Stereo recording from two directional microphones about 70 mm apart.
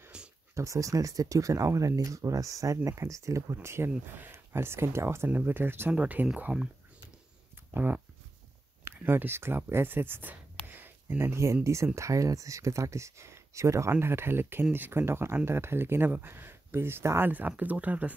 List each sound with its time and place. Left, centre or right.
0.1 s a sound: centre
0.6 s speech: right
3.6 s speech: right
5.9 s speech: right
7.7 s speech: right
8.8 s speech: right
13.9 s speech: right
17.3 s speech: right